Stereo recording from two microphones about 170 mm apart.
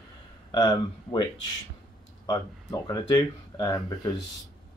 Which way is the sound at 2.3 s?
20° left (ahead or behind).